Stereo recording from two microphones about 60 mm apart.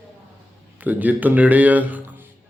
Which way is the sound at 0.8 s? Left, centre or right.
Right.